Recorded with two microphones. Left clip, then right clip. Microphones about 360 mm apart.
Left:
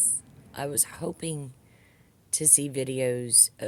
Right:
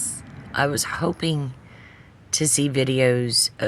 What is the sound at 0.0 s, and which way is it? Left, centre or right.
Speech, left.